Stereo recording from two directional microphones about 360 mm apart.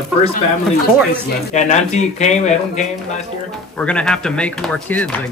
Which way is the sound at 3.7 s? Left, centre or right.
Centre.